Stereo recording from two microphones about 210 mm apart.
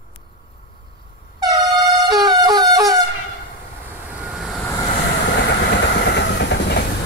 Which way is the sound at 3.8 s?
5° right (ahead or behind).